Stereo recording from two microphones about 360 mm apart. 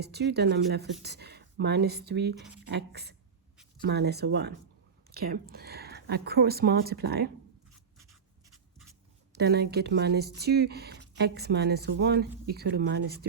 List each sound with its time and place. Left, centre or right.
0.0 s speech: right
9.3 s speech: right